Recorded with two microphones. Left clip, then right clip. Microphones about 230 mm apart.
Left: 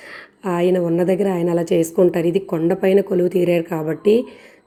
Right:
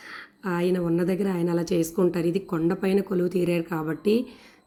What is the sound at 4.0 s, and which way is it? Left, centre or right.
Speech, right.